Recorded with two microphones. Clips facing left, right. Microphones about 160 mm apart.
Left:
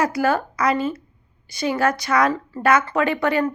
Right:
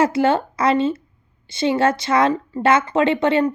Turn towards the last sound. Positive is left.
turn(degrees=-25)  # may be behind; listen again after turning